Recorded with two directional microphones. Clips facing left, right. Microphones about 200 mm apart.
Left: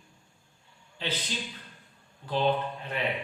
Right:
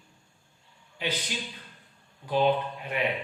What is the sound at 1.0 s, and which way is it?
Speech, 15° right (ahead or behind).